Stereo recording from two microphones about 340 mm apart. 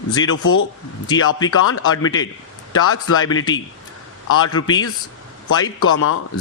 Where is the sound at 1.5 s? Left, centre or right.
Left.